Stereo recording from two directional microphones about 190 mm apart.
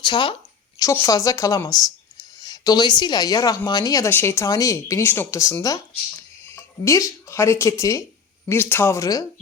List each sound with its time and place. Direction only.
0.0 s a woman's voice: 25° left (ahead or behind)